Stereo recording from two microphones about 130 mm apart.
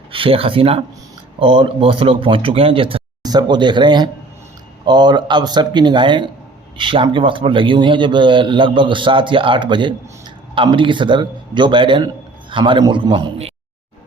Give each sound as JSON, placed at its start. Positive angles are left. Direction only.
{"t": 0.1, "sound": "speech", "side_deg": -45}
{"t": 3.2, "sound": "a man's voice", "side_deg": -35}